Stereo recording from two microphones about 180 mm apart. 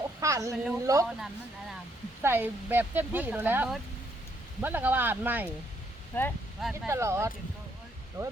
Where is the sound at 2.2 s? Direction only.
10° right (ahead or behind).